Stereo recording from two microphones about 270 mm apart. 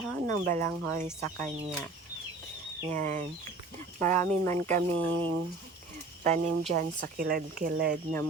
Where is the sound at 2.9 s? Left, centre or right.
Right.